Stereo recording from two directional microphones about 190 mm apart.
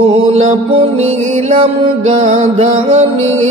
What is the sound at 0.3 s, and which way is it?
Mantra, 35° right (ahead or behind).